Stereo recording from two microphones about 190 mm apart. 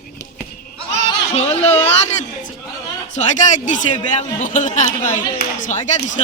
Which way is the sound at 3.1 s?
40° left (ahead or behind).